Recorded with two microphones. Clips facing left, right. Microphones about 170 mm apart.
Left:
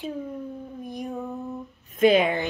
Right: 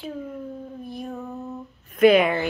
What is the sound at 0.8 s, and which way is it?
Female singing, 15° left (ahead or behind).